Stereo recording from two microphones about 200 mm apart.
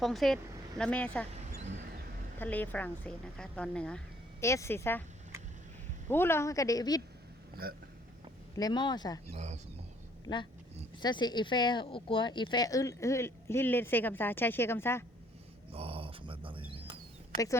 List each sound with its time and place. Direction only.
0.0 s speech: centre (ahead or behind)
1.3 s a sound: 35° right (ahead or behind)
2.4 s speech: 10° left (ahead or behind)
6.1 s speech: 10° left (ahead or behind)
8.5 s speech: 20° left (ahead or behind)
9.3 s speech: 35° right (ahead or behind)
11.0 s speech: 20° left (ahead or behind)
15.7 s a sound: 30° right (ahead or behind)
17.3 s speech: 15° left (ahead or behind)